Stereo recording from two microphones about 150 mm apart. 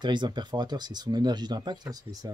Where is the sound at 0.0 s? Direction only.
30° right (ahead or behind).